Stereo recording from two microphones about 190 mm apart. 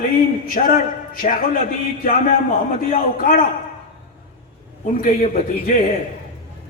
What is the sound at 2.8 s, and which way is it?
Speech, 45° left (ahead or behind).